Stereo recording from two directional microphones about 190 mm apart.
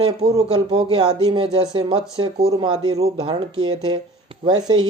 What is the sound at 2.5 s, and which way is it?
Speech, 25° right (ahead or behind).